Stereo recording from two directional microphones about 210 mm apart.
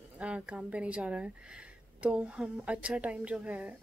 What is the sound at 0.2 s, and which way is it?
A woman's voice, 5° right (ahead or behind).